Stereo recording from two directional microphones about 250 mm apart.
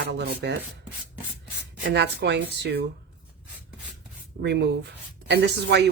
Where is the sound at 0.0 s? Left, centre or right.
Right.